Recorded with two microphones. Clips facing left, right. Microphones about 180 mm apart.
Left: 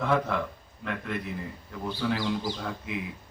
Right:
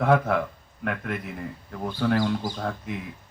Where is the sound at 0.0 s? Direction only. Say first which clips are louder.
Right 5 dB; 55° right (ahead or behind).